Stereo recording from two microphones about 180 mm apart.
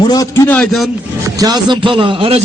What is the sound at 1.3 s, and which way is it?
A man's voice, 20° right (ahead or behind).